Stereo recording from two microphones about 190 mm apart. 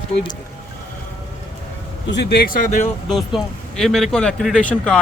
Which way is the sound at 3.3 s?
Centre (ahead or behind).